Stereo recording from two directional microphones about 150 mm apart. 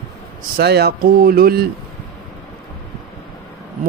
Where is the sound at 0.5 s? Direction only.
90° right.